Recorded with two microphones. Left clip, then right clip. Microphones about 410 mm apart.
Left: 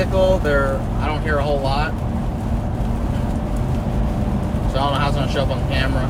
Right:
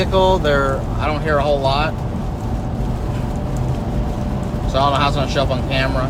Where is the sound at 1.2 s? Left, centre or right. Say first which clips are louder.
Right 4 dB; right.